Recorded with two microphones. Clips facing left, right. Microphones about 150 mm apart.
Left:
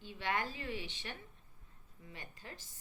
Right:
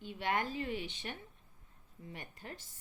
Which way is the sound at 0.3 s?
45° right (ahead or behind).